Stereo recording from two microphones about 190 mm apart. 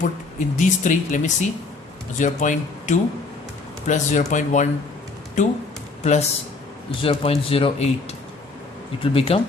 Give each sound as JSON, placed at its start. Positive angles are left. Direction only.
{"t": 0.0, "sound": "speech", "side_deg": 40}
{"t": 6.0, "sound": "speech", "side_deg": 35}